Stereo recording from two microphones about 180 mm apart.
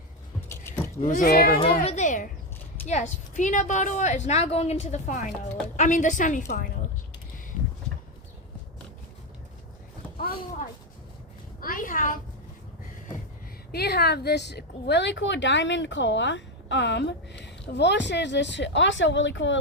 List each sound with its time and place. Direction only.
0.4 s keys jangling: 15° left (ahead or behind)
1.0 s a woman's voice: 45° left (ahead or behind)
1.8 s a sound: 40° left (ahead or behind)
2.8 s a woman's voice: 40° left (ahead or behind)
11.6 s a woman's voice: 50° left (ahead or behind)
13.7 s speech: 60° left (ahead or behind); by 19.5 s 90° left